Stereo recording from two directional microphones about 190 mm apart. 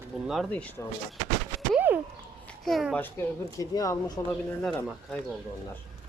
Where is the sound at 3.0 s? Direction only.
15° left (ahead or behind).